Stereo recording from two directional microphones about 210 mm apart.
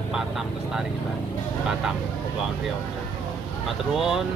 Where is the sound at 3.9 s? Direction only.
Centre (ahead or behind).